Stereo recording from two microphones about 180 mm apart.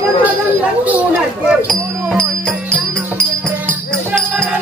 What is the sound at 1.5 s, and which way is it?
Speech, 5° left (ahead or behind).